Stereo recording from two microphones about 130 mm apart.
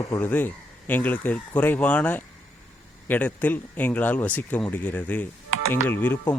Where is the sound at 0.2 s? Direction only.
15° left (ahead or behind).